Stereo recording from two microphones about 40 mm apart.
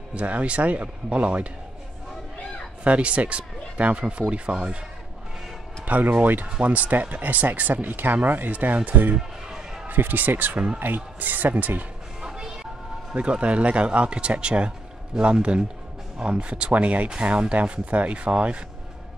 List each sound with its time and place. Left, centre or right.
0.1 s speech: right
2.8 s speech: right
6.1 s speech: right
6.6 s speech: right
9.8 s speech: right
12.3 s vehicle: centre
13.1 s speech: right